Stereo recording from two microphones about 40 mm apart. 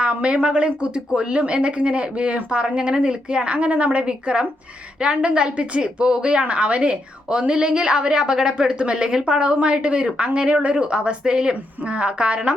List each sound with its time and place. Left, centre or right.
0.0 s a woman's voice: right